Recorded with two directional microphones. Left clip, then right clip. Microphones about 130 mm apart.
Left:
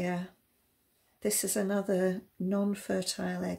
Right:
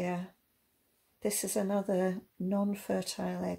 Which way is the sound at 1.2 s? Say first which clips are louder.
Left 1 dB; 20° right (ahead or behind).